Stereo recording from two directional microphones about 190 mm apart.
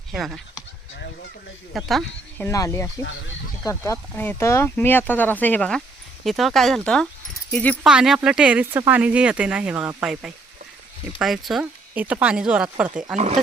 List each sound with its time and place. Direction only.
0.1 s speech: centre (ahead or behind)
1.7 s speech: centre (ahead or behind)
2.4 s speech: 15° left (ahead or behind)
7.9 s speech: 5° right (ahead or behind)
13.1 s speech: 35° right (ahead or behind)